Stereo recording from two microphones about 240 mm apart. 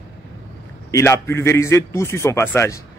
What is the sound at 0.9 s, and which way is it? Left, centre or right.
A man's voice, centre.